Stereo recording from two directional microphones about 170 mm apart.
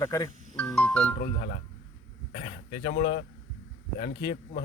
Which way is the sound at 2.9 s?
65° left (ahead or behind).